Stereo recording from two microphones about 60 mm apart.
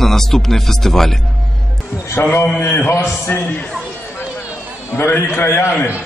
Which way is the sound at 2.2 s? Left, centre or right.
Left.